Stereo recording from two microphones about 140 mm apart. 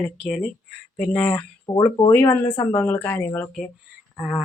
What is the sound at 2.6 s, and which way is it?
Speech, 15° left (ahead or behind).